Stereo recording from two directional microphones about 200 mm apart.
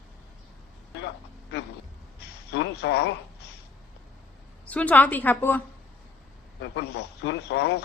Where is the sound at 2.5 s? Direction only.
55° left (ahead or behind).